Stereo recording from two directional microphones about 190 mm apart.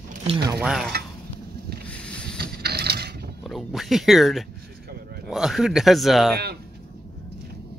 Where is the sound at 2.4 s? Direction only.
55° right (ahead or behind).